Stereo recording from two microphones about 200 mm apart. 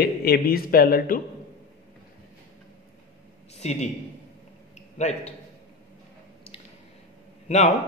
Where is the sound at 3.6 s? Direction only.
35° left (ahead or behind).